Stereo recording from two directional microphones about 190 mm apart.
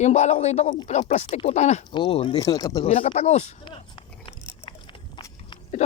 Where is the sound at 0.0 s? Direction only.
35° left (ahead or behind).